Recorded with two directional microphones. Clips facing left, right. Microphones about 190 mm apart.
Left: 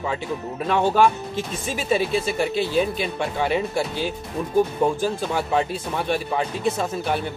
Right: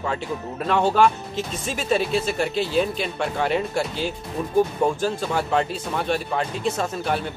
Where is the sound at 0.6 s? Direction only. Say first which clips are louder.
Even; 10° left (ahead or behind).